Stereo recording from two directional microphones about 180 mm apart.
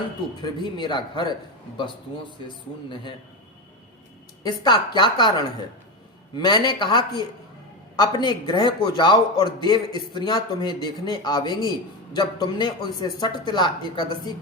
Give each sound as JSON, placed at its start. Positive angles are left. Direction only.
{"t": 0.4, "sound": "a man's voice", "side_deg": 25}
{"t": 2.9, "sound": "a man's voice", "side_deg": 25}
{"t": 4.4, "sound": "a man's voice", "side_deg": 25}